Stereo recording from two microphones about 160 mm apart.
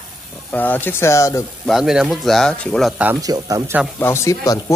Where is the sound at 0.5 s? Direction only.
10° left (ahead or behind).